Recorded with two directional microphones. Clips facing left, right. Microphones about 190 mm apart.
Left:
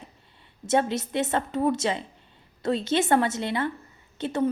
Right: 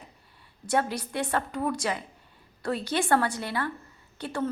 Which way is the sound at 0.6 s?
25° left (ahead or behind).